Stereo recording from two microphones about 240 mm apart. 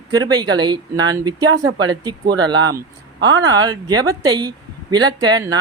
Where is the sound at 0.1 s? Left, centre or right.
Centre.